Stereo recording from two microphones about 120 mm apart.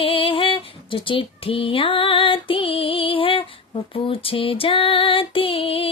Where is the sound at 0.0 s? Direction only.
45° left (ahead or behind).